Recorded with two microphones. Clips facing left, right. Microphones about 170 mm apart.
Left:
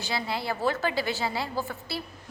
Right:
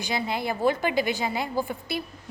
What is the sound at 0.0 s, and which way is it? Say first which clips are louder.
A woman's voice: right 3 dB; 20° right (ahead or behind).